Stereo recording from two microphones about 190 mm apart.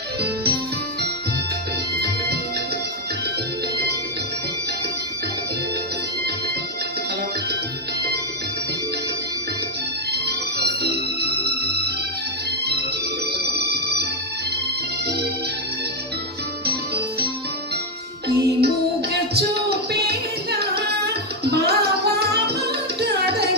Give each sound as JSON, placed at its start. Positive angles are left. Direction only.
{"t": 0.2, "sound": "music", "side_deg": -55}
{"t": 2.0, "sound": "music", "side_deg": -55}
{"t": 10.8, "sound": "music", "side_deg": -60}
{"t": 16.6, "sound": "music", "side_deg": -55}
{"t": 18.3, "sound": "music", "side_deg": -55}